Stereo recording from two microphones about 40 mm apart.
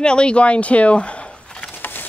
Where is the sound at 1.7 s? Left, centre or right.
Left.